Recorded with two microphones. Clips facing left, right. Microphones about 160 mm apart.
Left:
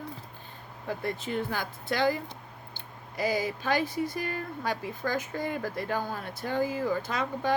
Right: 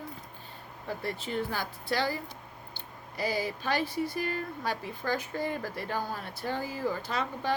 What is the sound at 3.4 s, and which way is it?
Speech, 50° left (ahead or behind).